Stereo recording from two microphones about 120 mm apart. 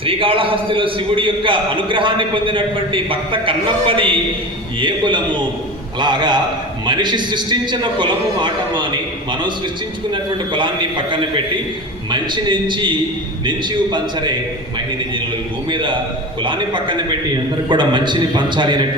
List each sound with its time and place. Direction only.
0.0 s a man's voice: 50° right (ahead or behind)
15.7 s a man's voice: 40° right (ahead or behind)